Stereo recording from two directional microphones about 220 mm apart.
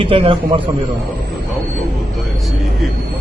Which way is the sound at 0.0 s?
25° right (ahead or behind).